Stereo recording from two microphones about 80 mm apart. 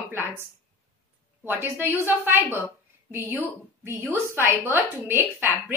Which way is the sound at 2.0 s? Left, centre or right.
Right.